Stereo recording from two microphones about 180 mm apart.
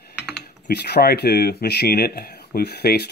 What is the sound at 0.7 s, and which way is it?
Speech, 65° left (ahead or behind).